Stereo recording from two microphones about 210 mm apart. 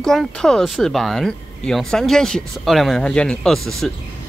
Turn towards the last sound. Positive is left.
turn(degrees=0)  # may be behind; listen again after turning